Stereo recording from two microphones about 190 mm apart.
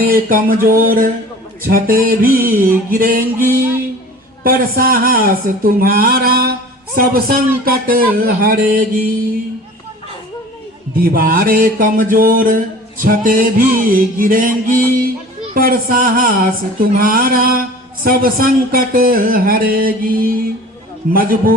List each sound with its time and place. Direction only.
0.1 s speech: 50° right (ahead or behind)
10.9 s speech: 50° right (ahead or behind)